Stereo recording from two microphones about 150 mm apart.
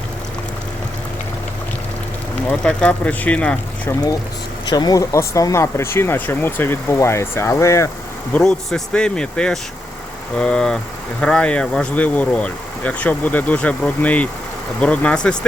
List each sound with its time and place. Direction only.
2.5 s speech: 10° left (ahead or behind)
3.8 s speech: 25° left (ahead or behind)
8.3 s speech: 5° left (ahead or behind)